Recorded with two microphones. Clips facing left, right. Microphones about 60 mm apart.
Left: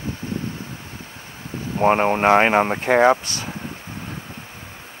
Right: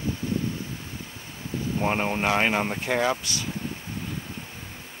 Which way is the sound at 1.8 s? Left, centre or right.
Left.